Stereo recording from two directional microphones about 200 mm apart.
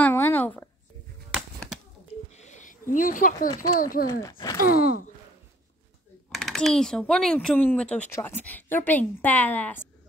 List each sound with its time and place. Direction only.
0.0 s a sound: 10° left (ahead or behind)
1.3 s chop: 5° right (ahead or behind)
2.3 s a sound: 35° left (ahead or behind)
3.4 s speech: 20° left (ahead or behind)
3.7 s gasp: 45° left (ahead or behind)
4.1 s a woman's voice: 20° left (ahead or behind)
4.6 s gasp: 45° left (ahead or behind)
6.3 s a woman's voice: centre (ahead or behind)